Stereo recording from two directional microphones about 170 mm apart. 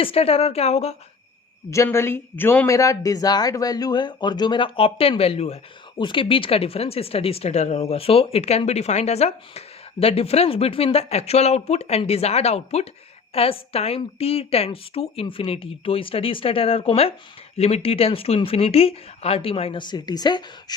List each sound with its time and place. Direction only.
0.0 s speech: 35° left (ahead or behind)
1.7 s speech: 15° left (ahead or behind)